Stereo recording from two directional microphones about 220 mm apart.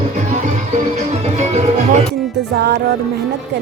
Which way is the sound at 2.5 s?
50° right (ahead or behind).